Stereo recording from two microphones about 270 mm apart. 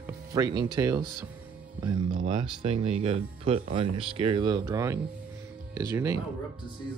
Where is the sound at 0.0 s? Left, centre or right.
Centre.